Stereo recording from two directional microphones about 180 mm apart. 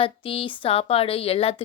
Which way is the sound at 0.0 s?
30° left (ahead or behind).